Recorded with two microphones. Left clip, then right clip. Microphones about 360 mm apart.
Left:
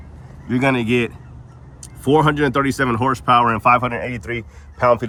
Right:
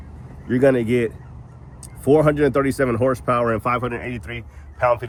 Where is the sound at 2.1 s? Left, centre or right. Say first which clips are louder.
Left 1 dB; centre.